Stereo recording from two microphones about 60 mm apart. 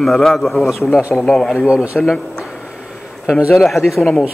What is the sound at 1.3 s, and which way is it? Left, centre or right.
Speech, centre.